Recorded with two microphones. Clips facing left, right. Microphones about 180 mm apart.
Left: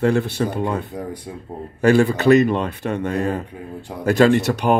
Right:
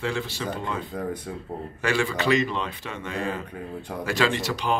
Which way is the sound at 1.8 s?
50° left (ahead or behind).